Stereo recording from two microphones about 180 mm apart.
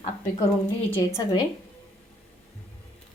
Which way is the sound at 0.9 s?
15° left (ahead or behind).